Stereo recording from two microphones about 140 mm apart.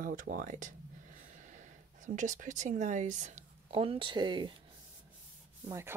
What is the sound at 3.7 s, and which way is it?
Speech, 40° right (ahead or behind).